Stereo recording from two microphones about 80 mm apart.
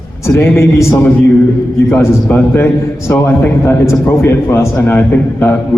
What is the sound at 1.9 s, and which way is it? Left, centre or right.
A man's voice, left.